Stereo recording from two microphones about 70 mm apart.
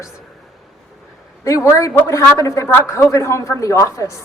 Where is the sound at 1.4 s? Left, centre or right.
Left.